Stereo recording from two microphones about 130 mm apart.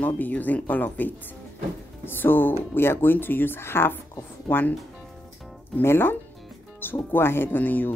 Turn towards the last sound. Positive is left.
turn(degrees=15)  # may be behind; listen again after turning